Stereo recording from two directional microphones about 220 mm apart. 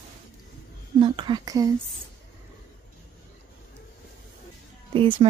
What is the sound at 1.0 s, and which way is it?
Speech, 20° right (ahead or behind).